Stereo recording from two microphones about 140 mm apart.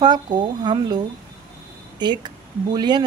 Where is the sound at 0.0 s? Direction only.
30° right (ahead or behind).